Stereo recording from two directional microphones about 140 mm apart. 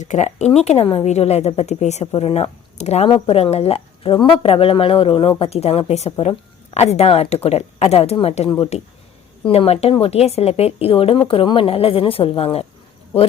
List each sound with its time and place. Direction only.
0.0 s a woman's voice: 55° left (ahead or behind)